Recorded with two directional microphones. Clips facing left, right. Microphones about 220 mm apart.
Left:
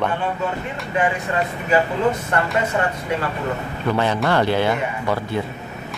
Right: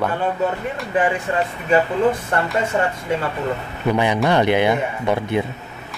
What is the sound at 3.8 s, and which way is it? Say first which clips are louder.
Speech: right 2 dB; 15° right (ahead or behind).